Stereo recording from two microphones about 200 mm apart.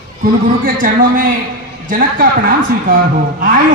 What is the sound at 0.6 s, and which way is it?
A man's voice, 45° right (ahead or behind).